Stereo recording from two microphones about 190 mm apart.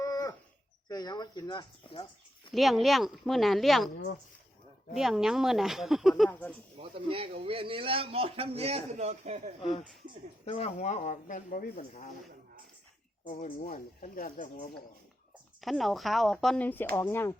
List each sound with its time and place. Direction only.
0.0 s a sound: 20° left (ahead or behind)
0.9 s speech: 20° left (ahead or behind)
2.5 s speech: centre (ahead or behind)
3.9 s speech: 60° left (ahead or behind)
4.9 s speech: centre (ahead or behind)
6.9 s a man's voice: 30° right (ahead or behind)
10.4 s speech: 30° left (ahead or behind)
13.2 s speech: 45° left (ahead or behind)
15.6 s speech: centre (ahead or behind)